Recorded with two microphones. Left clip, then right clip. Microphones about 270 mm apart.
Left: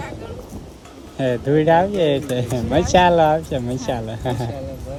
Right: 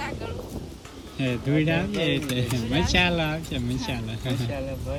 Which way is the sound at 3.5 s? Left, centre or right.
Centre.